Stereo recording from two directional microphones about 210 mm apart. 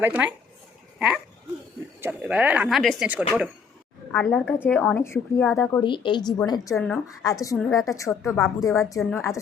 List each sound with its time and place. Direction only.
0.0 s a woman's voice: 5° right (ahead or behind); by 5.8 s 10° left (ahead or behind)
5.8 s a woman's voice: 25° left (ahead or behind)